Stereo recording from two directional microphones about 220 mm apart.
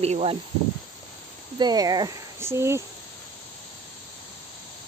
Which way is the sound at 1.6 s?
20° right (ahead or behind).